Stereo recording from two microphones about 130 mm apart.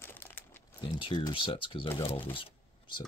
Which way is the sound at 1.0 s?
40° left (ahead or behind).